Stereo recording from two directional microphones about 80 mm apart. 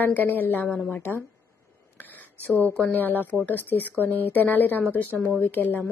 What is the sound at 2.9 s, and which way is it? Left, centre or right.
Speech, left.